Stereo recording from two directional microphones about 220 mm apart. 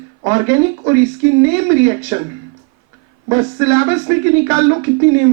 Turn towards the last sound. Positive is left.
turn(degrees=-15)  # may be behind; listen again after turning